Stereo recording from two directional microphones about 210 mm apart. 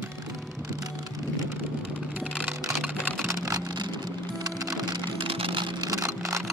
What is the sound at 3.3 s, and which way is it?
Music, 15° right (ahead or behind).